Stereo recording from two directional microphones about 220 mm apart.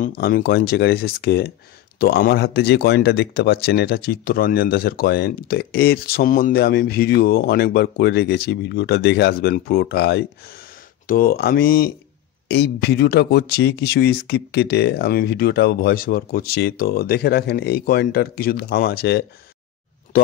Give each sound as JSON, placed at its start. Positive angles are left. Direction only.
{"t": 0.0, "sound": "speech", "side_deg": 40}